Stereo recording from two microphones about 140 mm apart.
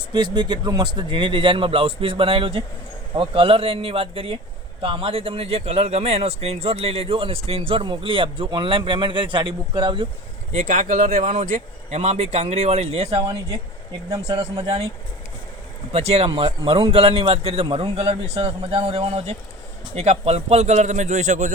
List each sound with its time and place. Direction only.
0.1 s a man's voice: 30° right (ahead or behind)
10.5 s speech: 65° right (ahead or behind); by 13.2 s 45° right (ahead or behind)
15.9 s a man's voice: 50° right (ahead or behind)